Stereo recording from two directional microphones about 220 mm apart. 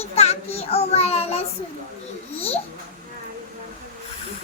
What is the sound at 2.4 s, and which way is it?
Babbling, 25° left (ahead or behind).